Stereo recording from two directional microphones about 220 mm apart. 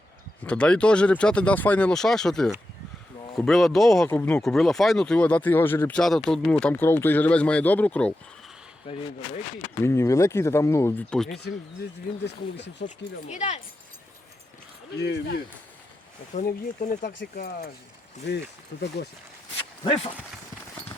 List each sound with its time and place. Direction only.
0.4 s speech: 5° left (ahead or behind)
9.8 s speech: 15° left (ahead or behind)
12.2 s speech: 55° left (ahead or behind)
12.8 s speech: 35° left (ahead or behind)
14.9 s speech: 50° left (ahead or behind)
16.3 s speech: 35° left (ahead or behind)
17.1 s speech: 50° left (ahead or behind)
19.8 s speech: 25° left (ahead or behind)